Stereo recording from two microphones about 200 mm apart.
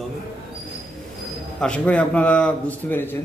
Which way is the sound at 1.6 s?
5° left (ahead or behind).